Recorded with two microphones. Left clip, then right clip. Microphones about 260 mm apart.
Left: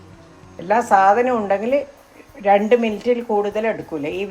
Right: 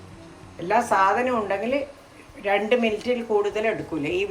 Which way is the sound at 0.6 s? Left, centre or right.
Left.